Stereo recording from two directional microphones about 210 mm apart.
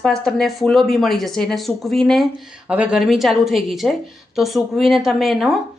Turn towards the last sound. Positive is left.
turn(degrees=0)  # may be behind; listen again after turning